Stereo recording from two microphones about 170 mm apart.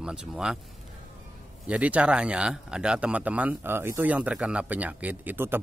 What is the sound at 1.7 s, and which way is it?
A man's voice, 10° right (ahead or behind).